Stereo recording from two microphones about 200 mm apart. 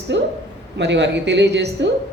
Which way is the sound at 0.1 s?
60° right (ahead or behind).